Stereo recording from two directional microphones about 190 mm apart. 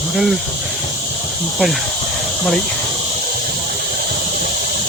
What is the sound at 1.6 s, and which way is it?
Speech, centre (ahead or behind).